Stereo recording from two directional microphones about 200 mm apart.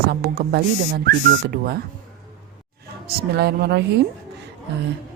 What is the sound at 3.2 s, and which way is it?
Speech, 55° right (ahead or behind).